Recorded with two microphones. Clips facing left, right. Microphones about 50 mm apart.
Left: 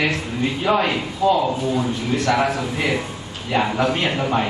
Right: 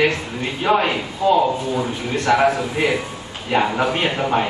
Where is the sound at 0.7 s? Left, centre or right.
Centre.